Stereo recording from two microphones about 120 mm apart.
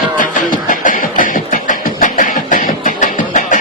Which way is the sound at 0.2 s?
90° left.